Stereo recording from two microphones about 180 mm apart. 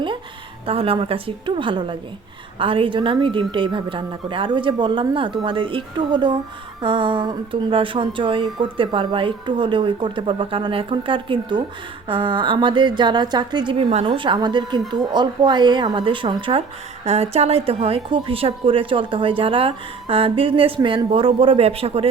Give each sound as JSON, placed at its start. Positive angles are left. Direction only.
{"t": 0.7, "sound": "a woman's voice", "side_deg": -30}